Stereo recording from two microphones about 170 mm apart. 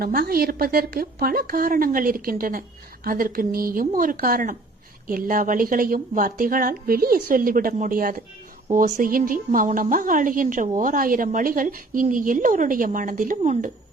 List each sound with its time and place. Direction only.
0.0 s a woman's voice: 60° right (ahead or behind)